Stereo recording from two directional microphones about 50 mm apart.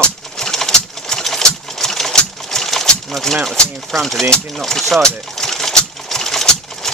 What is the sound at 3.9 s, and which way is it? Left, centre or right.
Speech, centre.